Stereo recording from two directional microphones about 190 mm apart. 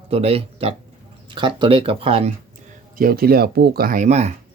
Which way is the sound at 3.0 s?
50° right (ahead or behind).